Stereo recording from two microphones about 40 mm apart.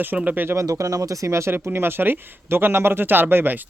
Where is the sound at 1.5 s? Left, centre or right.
Right.